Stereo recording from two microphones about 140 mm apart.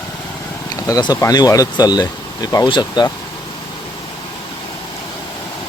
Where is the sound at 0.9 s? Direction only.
25° left (ahead or behind).